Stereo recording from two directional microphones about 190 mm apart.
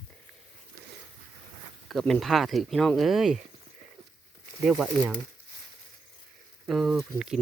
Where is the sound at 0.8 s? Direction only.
55° right (ahead or behind).